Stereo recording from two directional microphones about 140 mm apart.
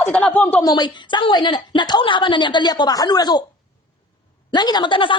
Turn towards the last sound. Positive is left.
turn(degrees=35)  # may be behind; listen again after turning